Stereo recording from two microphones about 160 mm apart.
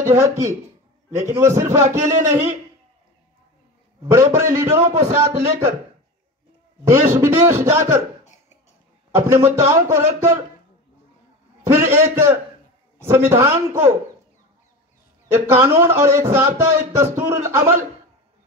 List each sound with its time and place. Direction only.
0.0 s a man's voice: 20° right (ahead or behind)
4.1 s speech: 15° right (ahead or behind)
5.3 s a man's voice: 40° right (ahead or behind)
6.8 s speech: 15° right (ahead or behind)
9.1 s speech: 15° right (ahead or behind)
11.6 s speech: 15° right (ahead or behind)
15.2 s speech: 20° right (ahead or behind)